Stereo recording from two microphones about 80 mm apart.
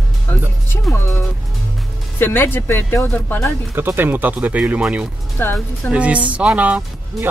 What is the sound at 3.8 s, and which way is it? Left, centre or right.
Speech, right.